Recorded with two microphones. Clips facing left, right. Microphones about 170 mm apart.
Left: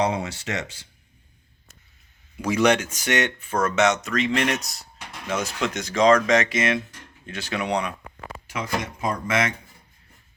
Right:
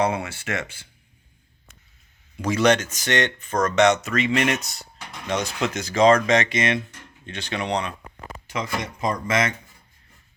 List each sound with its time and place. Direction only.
0.0 s speech: 20° left (ahead or behind)
2.4 s speech: 10° left (ahead or behind)